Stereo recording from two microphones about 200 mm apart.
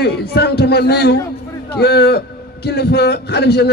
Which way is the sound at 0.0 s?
55° left (ahead or behind).